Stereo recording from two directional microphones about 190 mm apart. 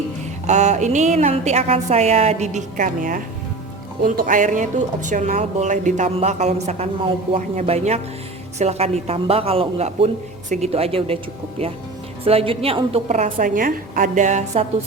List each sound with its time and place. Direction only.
0.4 s speech: 40° right (ahead or behind)
12.2 s speech: 30° right (ahead or behind)